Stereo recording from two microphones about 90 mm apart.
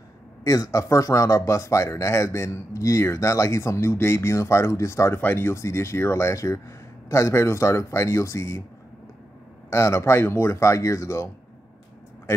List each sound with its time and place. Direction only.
0.4 s a man's voice: 40° left (ahead or behind)
9.7 s a man's voice: 35° left (ahead or behind)